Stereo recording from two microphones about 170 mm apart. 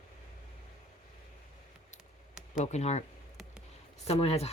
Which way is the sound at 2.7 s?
40° left (ahead or behind).